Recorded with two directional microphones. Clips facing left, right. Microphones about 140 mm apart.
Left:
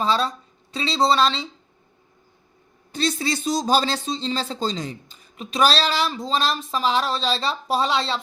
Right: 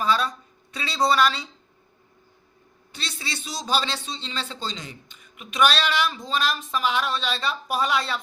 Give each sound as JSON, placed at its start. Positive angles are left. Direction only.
{"t": 0.0, "sound": "speech", "side_deg": 30}
{"t": 2.9, "sound": "a man's voice", "side_deg": 40}